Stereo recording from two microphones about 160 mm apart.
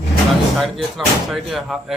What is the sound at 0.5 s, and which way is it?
A man's voice, centre (ahead or behind).